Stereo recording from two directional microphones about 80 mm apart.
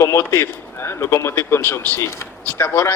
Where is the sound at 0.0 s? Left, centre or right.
Left.